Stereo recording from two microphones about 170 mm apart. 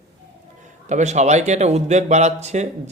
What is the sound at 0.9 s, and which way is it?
A man's voice, 45° right (ahead or behind).